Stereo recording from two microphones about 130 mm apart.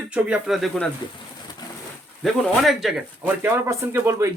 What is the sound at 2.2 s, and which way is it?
Speech, centre (ahead or behind).